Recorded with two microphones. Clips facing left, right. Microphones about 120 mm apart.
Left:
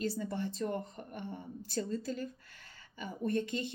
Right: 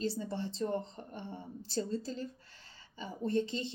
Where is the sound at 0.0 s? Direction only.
25° right (ahead or behind).